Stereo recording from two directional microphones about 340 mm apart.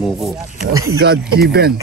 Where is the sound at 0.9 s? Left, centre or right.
Right.